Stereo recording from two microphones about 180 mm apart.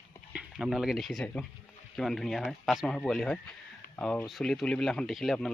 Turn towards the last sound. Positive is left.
turn(degrees=0)  # may be behind; listen again after turning